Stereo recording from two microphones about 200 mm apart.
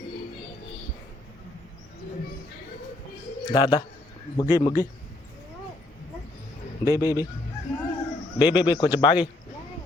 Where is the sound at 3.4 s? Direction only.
20° left (ahead or behind).